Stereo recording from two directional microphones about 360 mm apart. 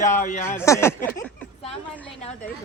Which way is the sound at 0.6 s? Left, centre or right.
Centre.